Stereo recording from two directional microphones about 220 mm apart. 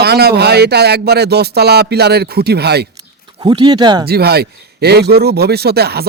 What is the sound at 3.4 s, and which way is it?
Speech, 20° right (ahead or behind).